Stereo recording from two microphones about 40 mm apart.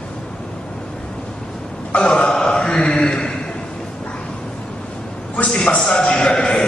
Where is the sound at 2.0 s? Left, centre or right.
Left.